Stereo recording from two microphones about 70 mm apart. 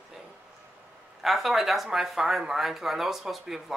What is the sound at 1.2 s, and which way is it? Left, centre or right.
Speech, centre.